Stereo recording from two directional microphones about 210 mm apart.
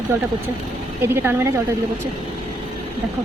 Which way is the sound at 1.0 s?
10° right (ahead or behind).